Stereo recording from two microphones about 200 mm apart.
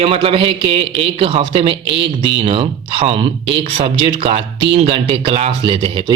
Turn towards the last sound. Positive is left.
turn(degrees=-25)  # may be behind; listen again after turning